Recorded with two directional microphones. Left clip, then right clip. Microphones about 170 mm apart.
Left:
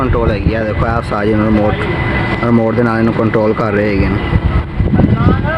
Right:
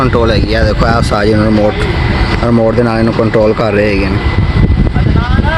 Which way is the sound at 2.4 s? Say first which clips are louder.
Right 3 dB; centre (ahead or behind).